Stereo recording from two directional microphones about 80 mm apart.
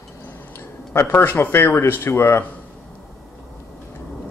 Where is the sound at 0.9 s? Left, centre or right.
Left.